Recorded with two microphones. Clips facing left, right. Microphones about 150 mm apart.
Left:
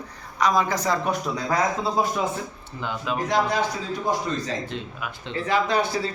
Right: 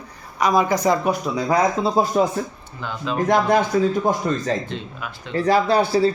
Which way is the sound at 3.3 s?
50° right (ahead or behind).